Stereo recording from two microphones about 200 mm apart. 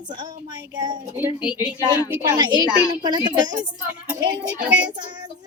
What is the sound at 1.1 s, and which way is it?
Speech, 10° right (ahead or behind).